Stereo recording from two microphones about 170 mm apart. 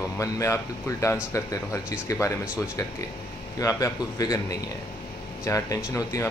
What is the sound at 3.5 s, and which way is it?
Speech, 20° left (ahead or behind).